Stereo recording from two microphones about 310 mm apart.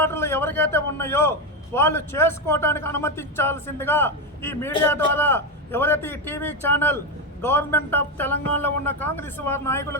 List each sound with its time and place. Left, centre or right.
0.0 s a man's voice: centre